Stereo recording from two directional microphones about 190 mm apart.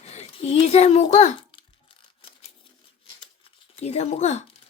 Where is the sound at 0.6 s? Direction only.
35° left (ahead or behind).